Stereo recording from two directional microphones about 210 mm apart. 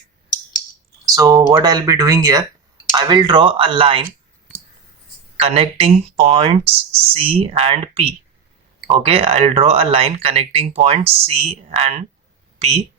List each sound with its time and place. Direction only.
1.0 s speech: 15° right (ahead or behind)
5.4 s speech: 30° right (ahead or behind)